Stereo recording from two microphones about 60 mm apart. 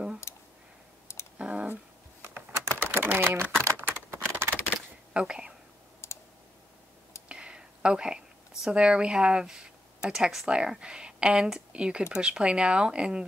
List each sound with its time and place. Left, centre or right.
0.3 s a sound: left
1.1 s computer keyboard: left
1.4 s computer keyboard: centre
2.2 s typing: right
3.6 s a sound: right
5.1 s speech: centre
6.0 s clicking: left
7.2 s a sound: centre
8.7 s speech: centre